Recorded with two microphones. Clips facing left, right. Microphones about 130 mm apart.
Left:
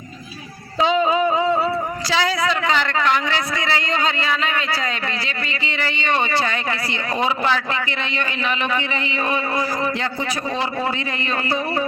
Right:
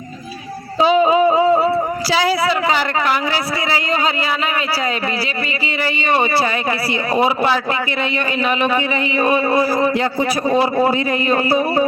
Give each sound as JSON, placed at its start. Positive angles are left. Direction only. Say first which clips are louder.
{"t": 0.9, "sound": "a sound", "louder": "right 5 dB", "side_deg": -20}
{"t": 2.6, "sound": "speech", "louder": "right 2 dB", "side_deg": -15}
{"t": 5.8, "sound": "speech", "louder": "right 4 dB", "side_deg": -10}
{"t": 9.5, "sound": "a man's voice", "louder": "right 7 dB", "side_deg": -35}
{"t": 10.2, "sound": "speech", "louder": "right 8 dB", "side_deg": -15}
{"t": 10.8, "sound": "a man's voice", "louder": "right 8 dB", "side_deg": -35}